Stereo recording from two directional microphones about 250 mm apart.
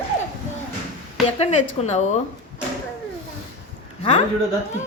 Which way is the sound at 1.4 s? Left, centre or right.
Left.